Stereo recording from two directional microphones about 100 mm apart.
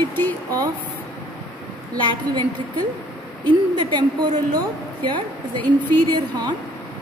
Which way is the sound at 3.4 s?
50° right (ahead or behind).